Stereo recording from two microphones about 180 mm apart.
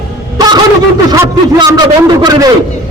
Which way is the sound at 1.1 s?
20° right (ahead or behind).